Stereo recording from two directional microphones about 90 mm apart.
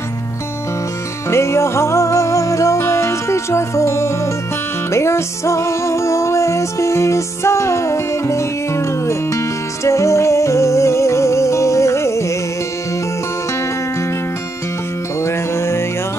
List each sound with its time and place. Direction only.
1.3 s music: 30° left (ahead or behind)
15.2 s music: 30° left (ahead or behind)